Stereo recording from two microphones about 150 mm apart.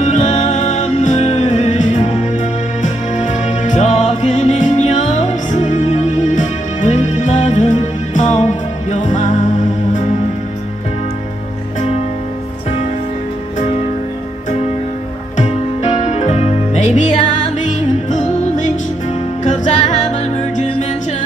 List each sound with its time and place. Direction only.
0.0 s music: 50° left (ahead or behind)
15.3 s music: 50° left (ahead or behind)